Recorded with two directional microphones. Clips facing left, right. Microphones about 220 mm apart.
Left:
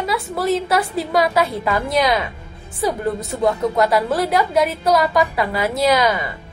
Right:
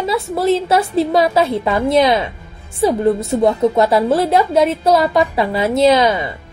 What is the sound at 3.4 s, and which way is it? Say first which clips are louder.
A woman's voice: right 3 dB; 25° right (ahead or behind).